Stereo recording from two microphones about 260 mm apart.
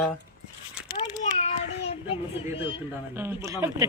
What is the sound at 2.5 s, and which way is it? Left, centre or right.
Speech, left.